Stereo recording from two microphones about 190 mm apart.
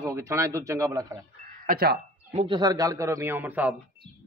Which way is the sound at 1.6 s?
55° right (ahead or behind).